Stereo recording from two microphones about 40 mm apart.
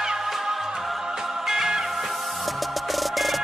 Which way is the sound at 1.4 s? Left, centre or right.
Centre.